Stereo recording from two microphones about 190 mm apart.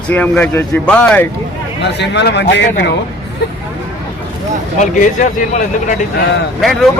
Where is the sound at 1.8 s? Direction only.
65° left (ahead or behind).